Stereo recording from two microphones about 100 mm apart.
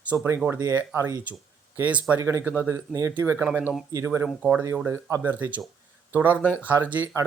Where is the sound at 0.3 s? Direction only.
15° right (ahead or behind).